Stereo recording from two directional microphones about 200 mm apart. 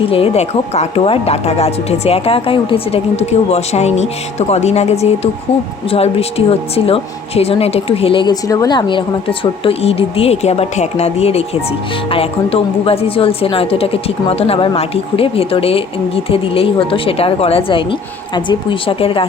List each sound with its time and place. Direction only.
0.1 s a woman's voice: 30° left (ahead or behind)